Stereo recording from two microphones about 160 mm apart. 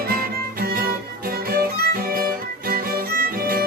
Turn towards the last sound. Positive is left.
turn(degrees=-65)  # may be behind; listen again after turning